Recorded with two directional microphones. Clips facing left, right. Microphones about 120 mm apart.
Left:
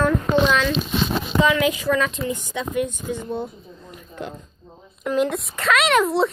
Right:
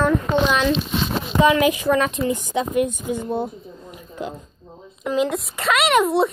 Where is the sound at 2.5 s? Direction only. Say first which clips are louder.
Right 4 dB; 15° right (ahead or behind).